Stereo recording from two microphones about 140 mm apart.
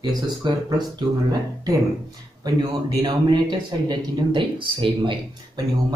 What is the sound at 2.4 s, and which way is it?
Speech, 30° right (ahead or behind).